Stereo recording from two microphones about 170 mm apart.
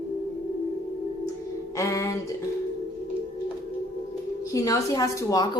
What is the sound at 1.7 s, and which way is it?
Speech, 20° left (ahead or behind).